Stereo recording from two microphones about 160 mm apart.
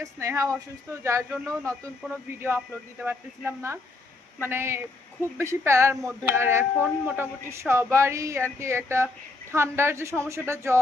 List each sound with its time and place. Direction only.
0.0 s speech: 20° right (ahead or behind)
3.0 s speech: 15° right (ahead or behind)